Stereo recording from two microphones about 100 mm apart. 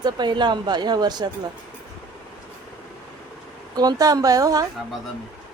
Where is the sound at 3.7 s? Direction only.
40° right (ahead or behind).